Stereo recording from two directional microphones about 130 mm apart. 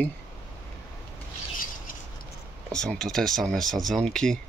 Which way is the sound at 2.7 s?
5° left (ahead or behind).